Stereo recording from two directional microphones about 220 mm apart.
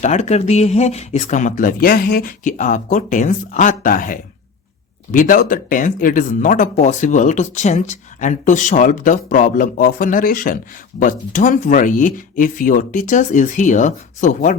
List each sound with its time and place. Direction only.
0.0 s speech: 30° left (ahead or behind)